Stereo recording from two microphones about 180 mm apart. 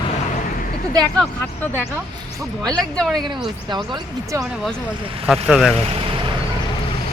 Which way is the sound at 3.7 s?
25° right (ahead or behind).